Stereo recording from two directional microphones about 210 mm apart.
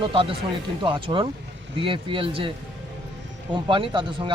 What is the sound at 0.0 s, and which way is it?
Speech, 25° right (ahead or behind).